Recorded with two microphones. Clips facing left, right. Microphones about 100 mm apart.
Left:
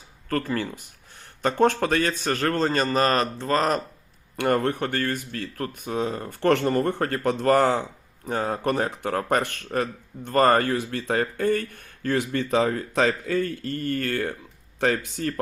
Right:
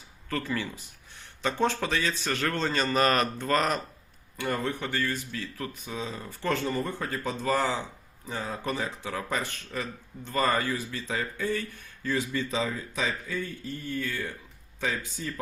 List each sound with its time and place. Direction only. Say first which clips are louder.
0.3 s a man's voice: left 5 dB; 45° left (ahead or behind)
4.4 s speech: left 8 dB; 65° left (ahead or behind)